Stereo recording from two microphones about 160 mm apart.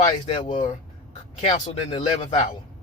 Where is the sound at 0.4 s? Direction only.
50° left (ahead or behind).